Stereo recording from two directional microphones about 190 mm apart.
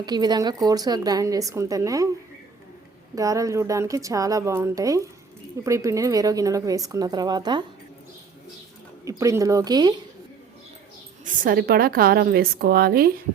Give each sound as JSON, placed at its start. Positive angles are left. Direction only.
{"t": 0.0, "sound": "speech", "side_deg": -20}
{"t": 3.2, "sound": "a woman's voice", "side_deg": -15}
{"t": 9.0, "sound": "a woman's voice", "side_deg": -15}
{"t": 11.3, "sound": "a woman's voice", "side_deg": -50}